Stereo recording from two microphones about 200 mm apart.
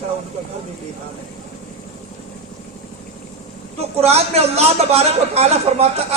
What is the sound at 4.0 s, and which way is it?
A man's voice, 30° right (ahead or behind).